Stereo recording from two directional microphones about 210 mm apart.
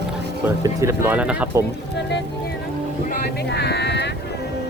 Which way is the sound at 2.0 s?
55° left (ahead or behind).